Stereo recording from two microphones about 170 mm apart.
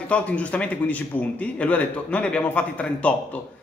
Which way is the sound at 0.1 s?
10° left (ahead or behind).